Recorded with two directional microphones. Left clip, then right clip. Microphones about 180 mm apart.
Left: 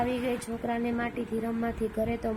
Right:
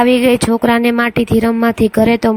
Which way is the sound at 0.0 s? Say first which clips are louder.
Right 19 dB; 65° right (ahead or behind).